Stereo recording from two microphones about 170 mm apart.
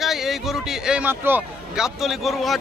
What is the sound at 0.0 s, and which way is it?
A man's voice, centre (ahead or behind).